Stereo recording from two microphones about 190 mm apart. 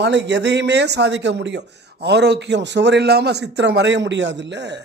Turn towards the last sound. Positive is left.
turn(degrees=-65)  # may be behind; listen again after turning